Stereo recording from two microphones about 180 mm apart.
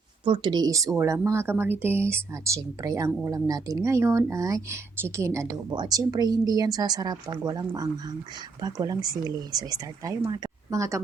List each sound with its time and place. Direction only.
0.3 s a woman's voice: 25° right (ahead or behind)